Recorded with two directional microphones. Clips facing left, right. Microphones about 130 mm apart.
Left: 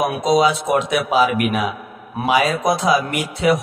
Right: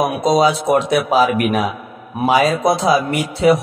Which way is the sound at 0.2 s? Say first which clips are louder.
Right 1 dB; 35° right (ahead or behind).